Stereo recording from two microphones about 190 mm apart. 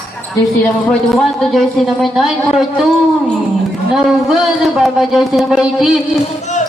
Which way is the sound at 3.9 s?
Centre (ahead or behind).